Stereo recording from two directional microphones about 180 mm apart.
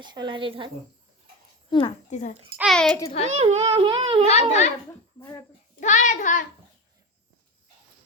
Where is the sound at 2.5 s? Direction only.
Centre (ahead or behind).